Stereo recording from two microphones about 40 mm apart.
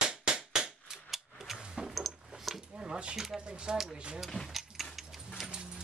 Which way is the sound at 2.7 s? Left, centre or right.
Right.